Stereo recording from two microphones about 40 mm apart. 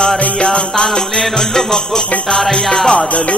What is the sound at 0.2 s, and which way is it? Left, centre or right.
Music, left.